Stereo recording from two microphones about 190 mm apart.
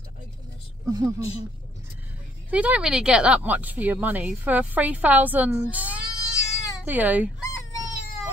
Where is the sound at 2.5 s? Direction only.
5° right (ahead or behind).